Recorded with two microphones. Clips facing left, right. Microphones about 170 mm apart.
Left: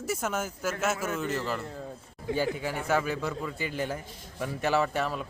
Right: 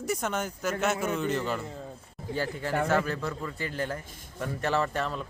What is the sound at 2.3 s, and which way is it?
Speech, 90° left.